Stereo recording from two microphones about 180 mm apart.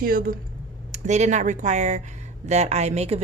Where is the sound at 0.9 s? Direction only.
40° right (ahead or behind).